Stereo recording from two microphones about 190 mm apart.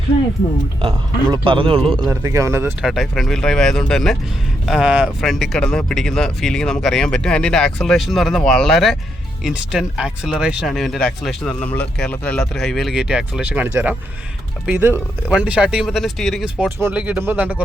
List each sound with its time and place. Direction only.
0.8 s speech: 25° right (ahead or behind)
2.0 s speech: 15° right (ahead or behind)
2.8 s speech: centre (ahead or behind)